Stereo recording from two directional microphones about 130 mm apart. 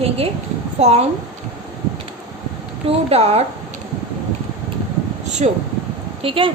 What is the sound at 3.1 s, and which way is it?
Speech, 50° right (ahead or behind).